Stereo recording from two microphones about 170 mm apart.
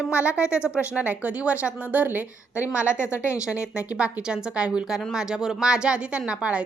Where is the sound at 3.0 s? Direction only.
15° left (ahead or behind).